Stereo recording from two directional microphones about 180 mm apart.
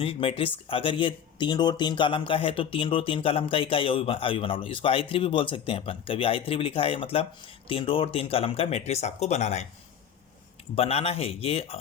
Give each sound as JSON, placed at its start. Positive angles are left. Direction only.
{"t": 0.0, "sound": "speech", "side_deg": 30}
{"t": 10.8, "sound": "speech", "side_deg": 35}